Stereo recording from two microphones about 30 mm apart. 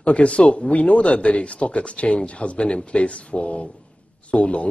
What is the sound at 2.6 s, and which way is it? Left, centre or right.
Speech, left.